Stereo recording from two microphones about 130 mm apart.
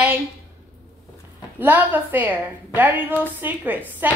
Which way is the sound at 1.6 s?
15° right (ahead or behind).